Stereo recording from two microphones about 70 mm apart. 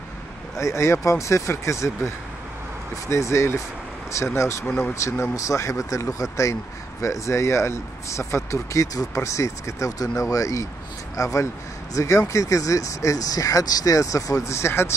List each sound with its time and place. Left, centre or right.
0.6 s speech: left
4.6 s speech: centre
5.0 s speech: left
5.3 s speech: left